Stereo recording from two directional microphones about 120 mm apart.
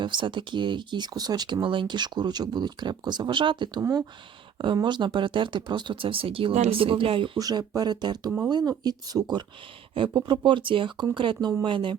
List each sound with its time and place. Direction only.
0.0 s speech: 40° right (ahead or behind)
7.3 s speech: 30° right (ahead or behind)